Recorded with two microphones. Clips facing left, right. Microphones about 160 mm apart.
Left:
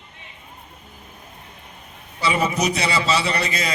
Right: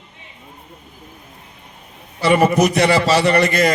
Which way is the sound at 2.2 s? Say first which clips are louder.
Right 8 dB; 60° right (ahead or behind).